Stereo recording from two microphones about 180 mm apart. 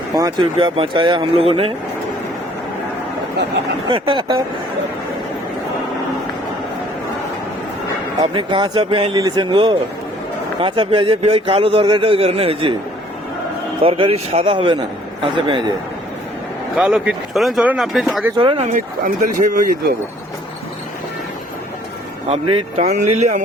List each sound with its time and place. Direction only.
0.2 s speech: 25° right (ahead or behind)
3.8 s speech: 25° right (ahead or behind)
8.2 s a man's voice: 25° right (ahead or behind)
13.8 s a man's voice: 30° right (ahead or behind)
16.7 s speech: 5° right (ahead or behind)
18.3 s speech: 30° right (ahead or behind); by 19.7 s 45° right (ahead or behind)
22.3 s a man's voice: 30° right (ahead or behind)